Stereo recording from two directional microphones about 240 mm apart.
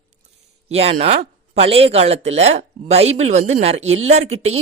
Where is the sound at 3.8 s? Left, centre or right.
Right.